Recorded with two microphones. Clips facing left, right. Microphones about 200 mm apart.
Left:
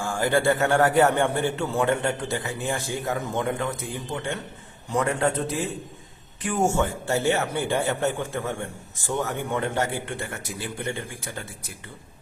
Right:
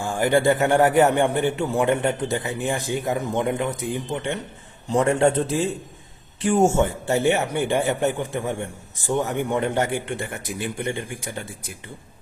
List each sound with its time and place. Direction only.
0.0 s a man's voice: 20° right (ahead or behind)